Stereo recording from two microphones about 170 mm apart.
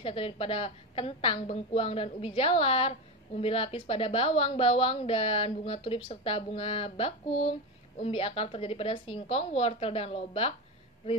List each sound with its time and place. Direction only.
0.0 s a woman's voice: 35° left (ahead or behind)